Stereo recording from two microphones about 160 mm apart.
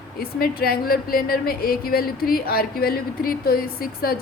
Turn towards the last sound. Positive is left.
turn(degrees=70)  # may be behind; listen again after turning